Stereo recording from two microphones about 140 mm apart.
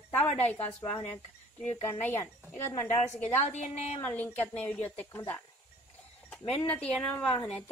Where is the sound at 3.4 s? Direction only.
55° left (ahead or behind).